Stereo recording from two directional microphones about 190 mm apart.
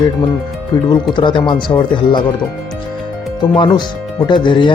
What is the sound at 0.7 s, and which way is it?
A man's voice, 25° left (ahead or behind).